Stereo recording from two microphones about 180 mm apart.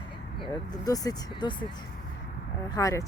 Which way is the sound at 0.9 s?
20° left (ahead or behind).